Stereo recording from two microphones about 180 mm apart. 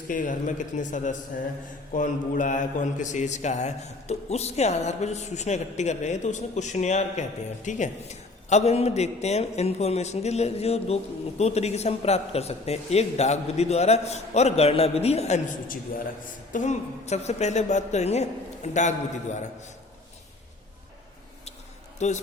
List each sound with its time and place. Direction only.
0.1 s a man's voice: 45° left (ahead or behind)
21.9 s a man's voice: 40° left (ahead or behind)